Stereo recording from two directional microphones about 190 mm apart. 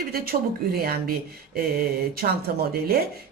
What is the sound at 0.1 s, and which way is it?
A woman's voice, 50° right (ahead or behind).